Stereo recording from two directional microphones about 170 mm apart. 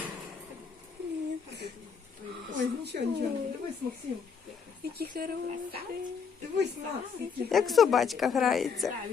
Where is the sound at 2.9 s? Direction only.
60° right (ahead or behind).